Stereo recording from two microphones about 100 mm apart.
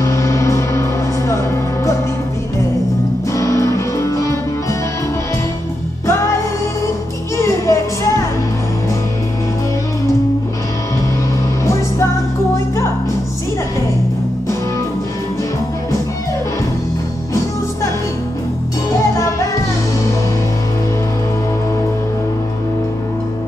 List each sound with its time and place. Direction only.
0.0 s music: 30° left (ahead or behind)
3.3 s music: 30° left (ahead or behind)
6.0 s music: 30° left (ahead or behind)
19.1 s music: 30° left (ahead or behind)